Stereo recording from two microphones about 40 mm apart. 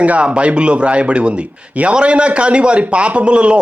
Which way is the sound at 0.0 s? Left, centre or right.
Right.